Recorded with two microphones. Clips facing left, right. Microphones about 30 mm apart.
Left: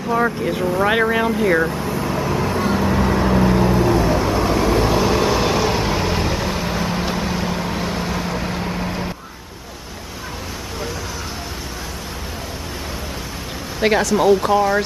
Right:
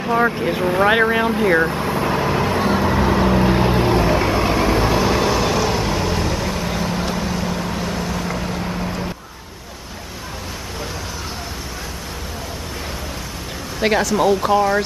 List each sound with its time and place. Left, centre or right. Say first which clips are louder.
0.1 s speech: right 1 dB; centre
1.7 s vehicle: right 3 dB; right
3.4 s vehicle: even; right
4.0 s vehicle: right 1 dB; right; by 9.0 s centre
13.7 s speech: left 1 dB; centre